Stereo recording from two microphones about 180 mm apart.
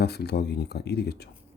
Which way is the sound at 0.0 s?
65° left (ahead or behind).